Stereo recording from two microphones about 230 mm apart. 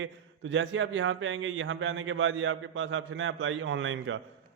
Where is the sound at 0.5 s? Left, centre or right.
Right.